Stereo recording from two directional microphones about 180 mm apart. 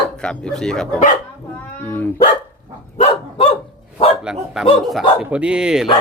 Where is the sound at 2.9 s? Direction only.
35° left (ahead or behind).